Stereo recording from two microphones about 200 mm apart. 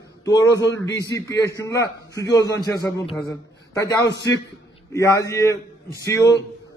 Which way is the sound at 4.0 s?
60° left (ahead or behind).